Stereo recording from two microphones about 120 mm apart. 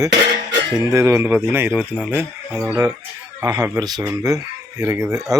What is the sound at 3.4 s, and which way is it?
Speech, 30° right (ahead or behind).